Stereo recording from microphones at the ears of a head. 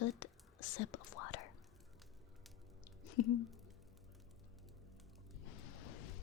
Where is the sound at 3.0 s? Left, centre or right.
Left.